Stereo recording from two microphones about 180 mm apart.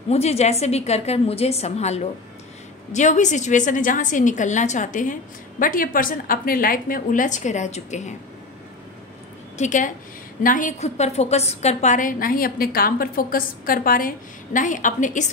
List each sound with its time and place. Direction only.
0.1 s a woman's voice: 35° left (ahead or behind)
9.6 s a woman's voice: 45° left (ahead or behind)